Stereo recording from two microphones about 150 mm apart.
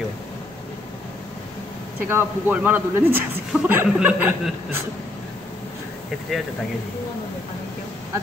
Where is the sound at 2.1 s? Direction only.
10° right (ahead or behind).